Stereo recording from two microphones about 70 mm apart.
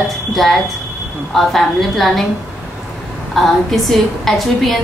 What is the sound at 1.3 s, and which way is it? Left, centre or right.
Speech, centre.